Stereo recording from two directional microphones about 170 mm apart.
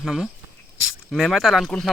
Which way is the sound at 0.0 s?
5° right (ahead or behind).